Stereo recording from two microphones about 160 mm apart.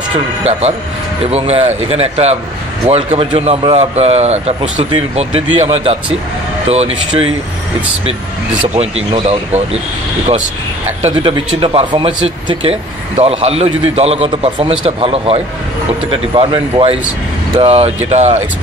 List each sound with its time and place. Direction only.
0.1 s a man's voice: 40° right (ahead or behind)
8.7 s a man's voice: 40° right (ahead or behind)
11.0 s a man's voice: 40° right (ahead or behind)
11.3 s a man's voice: 30° right (ahead or behind)